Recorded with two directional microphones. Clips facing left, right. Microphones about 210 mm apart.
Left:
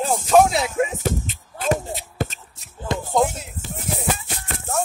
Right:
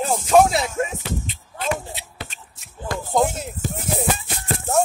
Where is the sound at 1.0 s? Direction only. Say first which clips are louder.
Left 4 dB; 45° left (ahead or behind).